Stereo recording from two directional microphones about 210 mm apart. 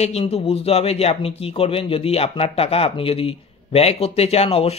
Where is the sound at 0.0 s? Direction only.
30° left (ahead or behind).